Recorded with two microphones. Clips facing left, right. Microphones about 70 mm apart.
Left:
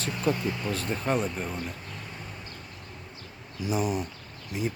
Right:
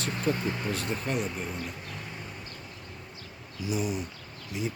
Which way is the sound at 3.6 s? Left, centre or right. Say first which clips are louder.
Left 3 dB; left.